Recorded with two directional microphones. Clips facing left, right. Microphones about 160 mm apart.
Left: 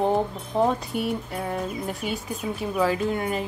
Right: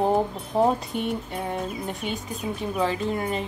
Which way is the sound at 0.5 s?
35° right (ahead or behind).